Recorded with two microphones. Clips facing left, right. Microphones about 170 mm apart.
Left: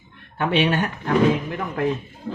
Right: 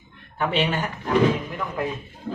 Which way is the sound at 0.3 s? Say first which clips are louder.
Left 3 dB; 65° left (ahead or behind).